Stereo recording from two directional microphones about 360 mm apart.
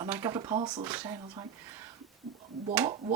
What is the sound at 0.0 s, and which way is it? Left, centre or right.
Speech, centre.